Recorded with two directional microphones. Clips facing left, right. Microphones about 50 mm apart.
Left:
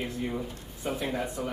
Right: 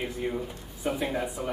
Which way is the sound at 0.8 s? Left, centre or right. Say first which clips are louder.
Right 2 dB; centre.